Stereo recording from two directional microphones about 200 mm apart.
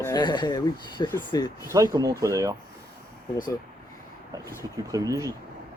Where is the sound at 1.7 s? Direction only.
20° right (ahead or behind).